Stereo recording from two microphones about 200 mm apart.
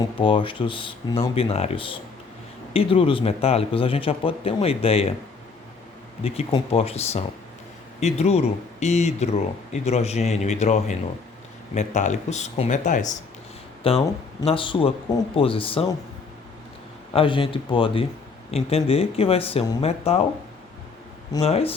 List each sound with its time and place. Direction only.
0.2 s a man's voice: 25° left (ahead or behind)
6.2 s speech: 30° left (ahead or behind)
13.8 s a man's voice: 30° left (ahead or behind)
17.1 s a man's voice: 25° left (ahead or behind)
21.3 s a man's voice: 30° left (ahead or behind)